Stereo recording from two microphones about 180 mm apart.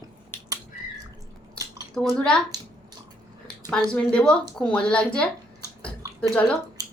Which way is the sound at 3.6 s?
5° left (ahead or behind).